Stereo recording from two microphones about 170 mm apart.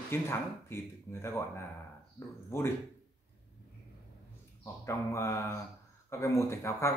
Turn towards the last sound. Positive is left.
turn(degrees=15)  # may be behind; listen again after turning